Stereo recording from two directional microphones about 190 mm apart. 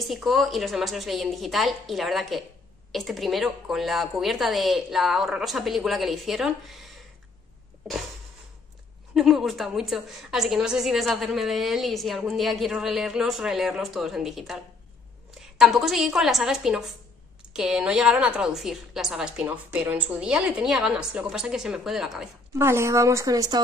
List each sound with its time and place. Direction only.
0.0 s a woman's voice: centre (ahead or behind)
9.1 s a woman's voice: centre (ahead or behind)
22.6 s a woman's voice: 15° right (ahead or behind)